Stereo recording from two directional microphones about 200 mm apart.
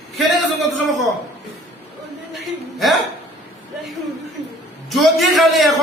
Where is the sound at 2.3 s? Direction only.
Centre (ahead or behind).